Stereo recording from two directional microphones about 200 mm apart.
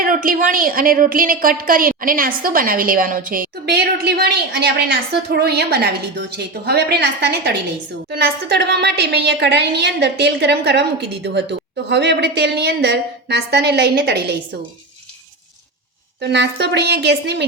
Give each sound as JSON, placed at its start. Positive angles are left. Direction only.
{"t": 0.0, "sound": "a woman's voice", "side_deg": -45}
{"t": 16.2, "sound": "a woman's voice", "side_deg": -55}